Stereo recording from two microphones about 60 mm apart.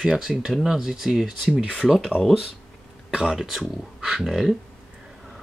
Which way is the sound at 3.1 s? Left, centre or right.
Centre.